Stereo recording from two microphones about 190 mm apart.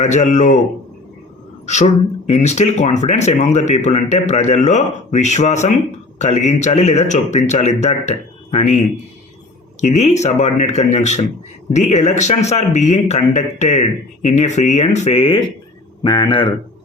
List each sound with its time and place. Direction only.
0.0 s a man's voice: 40° left (ahead or behind)
2.3 s a man's voice: 35° left (ahead or behind)
9.8 s a man's voice: 35° left (ahead or behind)